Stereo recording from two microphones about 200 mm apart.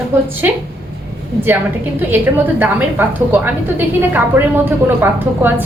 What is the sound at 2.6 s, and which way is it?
Speech, 10° right (ahead or behind).